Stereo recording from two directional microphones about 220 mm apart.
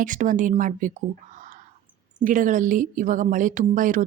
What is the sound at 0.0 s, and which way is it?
Speech, 35° right (ahead or behind).